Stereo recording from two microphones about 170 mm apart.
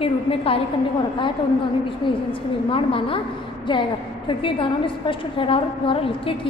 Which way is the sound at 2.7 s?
30° left (ahead or behind).